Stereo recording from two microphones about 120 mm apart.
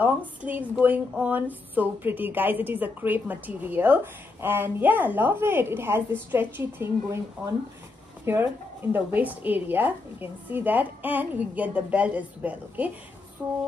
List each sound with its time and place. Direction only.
0.0 s speech: 15° right (ahead or behind)
8.3 s speech: 20° right (ahead or behind)